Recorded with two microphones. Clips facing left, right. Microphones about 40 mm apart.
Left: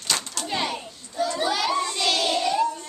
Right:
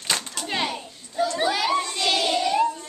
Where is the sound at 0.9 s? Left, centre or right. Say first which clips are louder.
Right 1 dB; centre.